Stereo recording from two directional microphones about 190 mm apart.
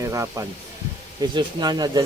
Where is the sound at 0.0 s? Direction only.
15° right (ahead or behind).